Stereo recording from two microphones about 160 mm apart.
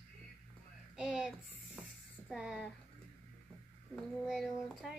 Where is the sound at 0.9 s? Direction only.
5° right (ahead or behind).